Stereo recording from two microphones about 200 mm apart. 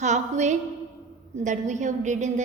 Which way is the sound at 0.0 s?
35° right (ahead or behind).